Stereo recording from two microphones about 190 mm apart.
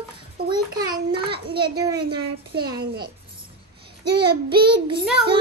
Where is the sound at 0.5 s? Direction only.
20° right (ahead or behind).